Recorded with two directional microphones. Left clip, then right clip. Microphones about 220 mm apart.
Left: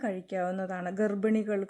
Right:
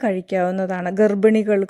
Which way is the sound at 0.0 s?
40° right (ahead or behind).